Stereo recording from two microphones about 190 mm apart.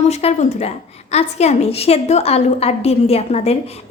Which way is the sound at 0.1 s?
35° left (ahead or behind).